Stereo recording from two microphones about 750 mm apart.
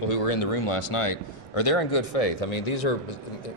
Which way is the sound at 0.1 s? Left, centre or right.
Left.